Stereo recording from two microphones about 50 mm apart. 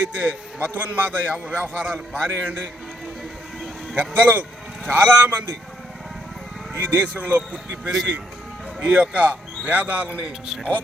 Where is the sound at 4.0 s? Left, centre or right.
Right.